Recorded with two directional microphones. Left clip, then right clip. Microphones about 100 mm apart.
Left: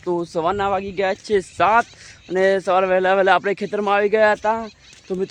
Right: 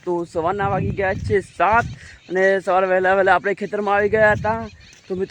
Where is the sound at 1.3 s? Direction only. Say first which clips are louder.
Left 1 dB; 10° left (ahead or behind).